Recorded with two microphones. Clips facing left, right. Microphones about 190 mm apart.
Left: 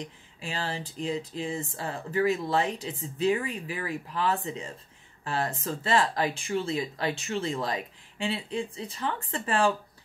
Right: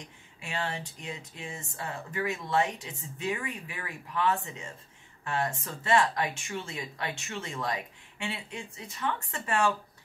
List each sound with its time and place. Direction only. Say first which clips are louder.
0.4 s speech: left 1 dB; 35° left (ahead or behind)